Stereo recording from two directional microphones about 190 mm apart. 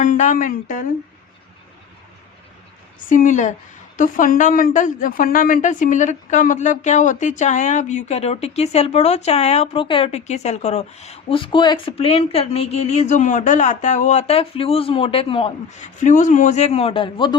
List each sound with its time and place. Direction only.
0.0 s speech: 40° left (ahead or behind)
3.1 s a woman's voice: 40° left (ahead or behind); by 17.3 s 25° left (ahead or behind)